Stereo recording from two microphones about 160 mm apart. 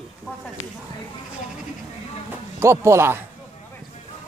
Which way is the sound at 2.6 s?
15° right (ahead or behind).